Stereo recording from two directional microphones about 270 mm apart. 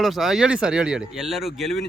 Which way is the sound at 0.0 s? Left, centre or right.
Centre.